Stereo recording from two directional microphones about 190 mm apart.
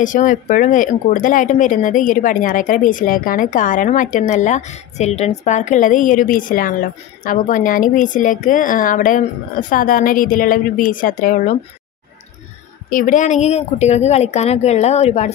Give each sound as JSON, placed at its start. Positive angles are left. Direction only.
{"t": 0.0, "sound": "speech", "side_deg": 45}
{"t": 12.9, "sound": "speech", "side_deg": 45}